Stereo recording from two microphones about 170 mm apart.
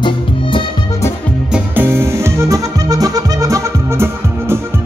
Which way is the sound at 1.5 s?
10° right (ahead or behind).